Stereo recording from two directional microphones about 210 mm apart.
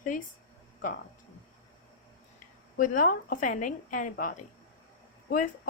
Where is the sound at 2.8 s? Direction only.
40° left (ahead or behind).